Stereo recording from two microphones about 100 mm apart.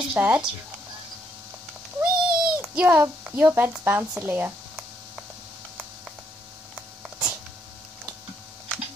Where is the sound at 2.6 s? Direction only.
15° right (ahead or behind).